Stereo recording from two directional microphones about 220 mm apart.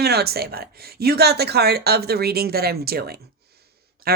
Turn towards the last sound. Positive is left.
turn(degrees=-45)  # may be behind; listen again after turning